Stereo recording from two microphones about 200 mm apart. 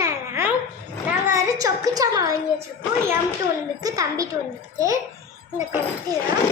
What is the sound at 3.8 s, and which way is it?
A child's voice, 15° right (ahead or behind).